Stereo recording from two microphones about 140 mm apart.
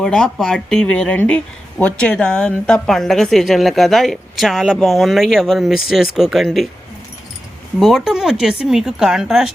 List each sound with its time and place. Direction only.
0.0 s a woman's voice: 5° left (ahead or behind)
7.8 s a woman's voice: centre (ahead or behind)